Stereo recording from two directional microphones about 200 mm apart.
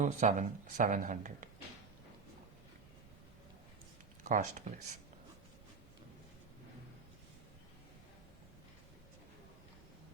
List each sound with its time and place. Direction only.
0.0 s speech: 35° right (ahead or behind)
4.2 s speech: 40° right (ahead or behind)